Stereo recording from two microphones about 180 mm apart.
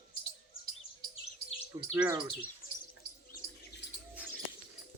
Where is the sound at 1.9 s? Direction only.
5° right (ahead or behind).